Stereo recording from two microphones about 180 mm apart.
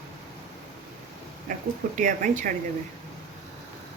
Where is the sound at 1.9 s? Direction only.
45° right (ahead or behind).